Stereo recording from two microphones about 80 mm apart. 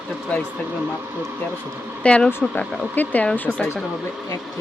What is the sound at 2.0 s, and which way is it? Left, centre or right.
Speech, centre.